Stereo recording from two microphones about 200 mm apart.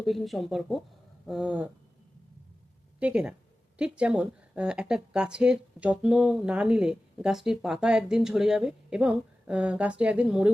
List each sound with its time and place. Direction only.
0.0 s speech: centre (ahead or behind)
1.3 s a sound: 5° right (ahead or behind)
3.0 s speech: 5° right (ahead or behind)